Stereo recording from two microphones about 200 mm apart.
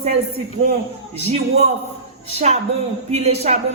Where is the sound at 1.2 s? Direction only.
30° right (ahead or behind).